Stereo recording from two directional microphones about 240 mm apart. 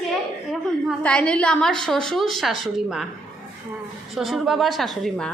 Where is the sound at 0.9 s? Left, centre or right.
Centre.